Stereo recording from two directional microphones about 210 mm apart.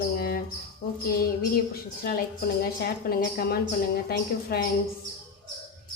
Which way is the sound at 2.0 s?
50° left (ahead or behind).